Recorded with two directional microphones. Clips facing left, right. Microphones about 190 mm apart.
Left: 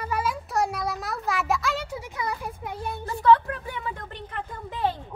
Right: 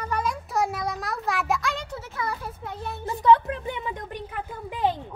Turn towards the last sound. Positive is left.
turn(degrees=-10)  # may be behind; listen again after turning